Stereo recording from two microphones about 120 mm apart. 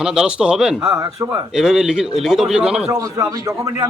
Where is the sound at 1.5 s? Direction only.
5° right (ahead or behind).